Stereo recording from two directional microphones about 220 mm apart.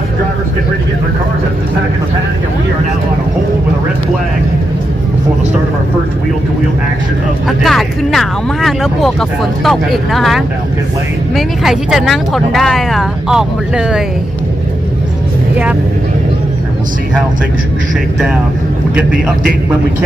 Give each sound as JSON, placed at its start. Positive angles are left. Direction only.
{"t": 7.4, "sound": "speech", "side_deg": 0}